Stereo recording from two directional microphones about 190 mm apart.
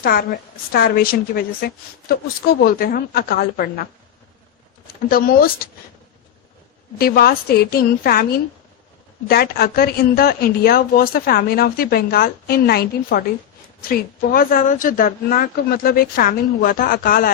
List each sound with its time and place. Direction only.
0.0 s a woman's voice: 50° left (ahead or behind)
7.0 s a woman's voice: 55° left (ahead or behind)